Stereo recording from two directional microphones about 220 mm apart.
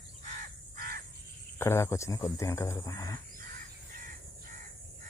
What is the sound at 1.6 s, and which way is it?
Speech, 10° left (ahead or behind).